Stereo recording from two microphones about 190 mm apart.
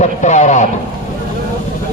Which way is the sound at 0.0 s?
40° left (ahead or behind).